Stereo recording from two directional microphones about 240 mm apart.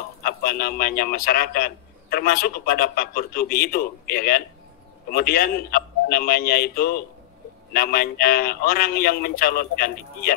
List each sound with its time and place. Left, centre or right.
0.2 s a man's voice: left